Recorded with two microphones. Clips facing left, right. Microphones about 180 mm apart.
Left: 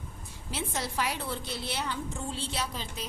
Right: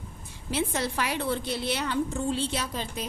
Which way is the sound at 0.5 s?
65° right (ahead or behind).